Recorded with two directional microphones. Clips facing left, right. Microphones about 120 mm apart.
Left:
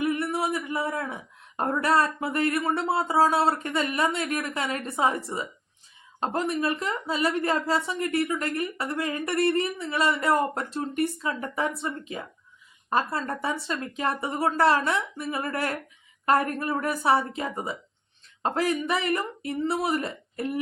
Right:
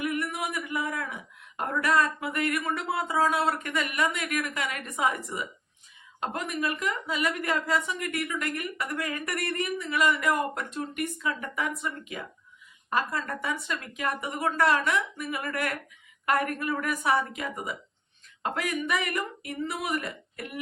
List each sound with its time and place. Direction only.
0.0 s a woman's voice: 30° left (ahead or behind)